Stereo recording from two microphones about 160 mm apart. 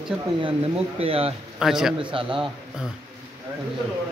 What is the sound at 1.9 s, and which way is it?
Speech, 35° right (ahead or behind).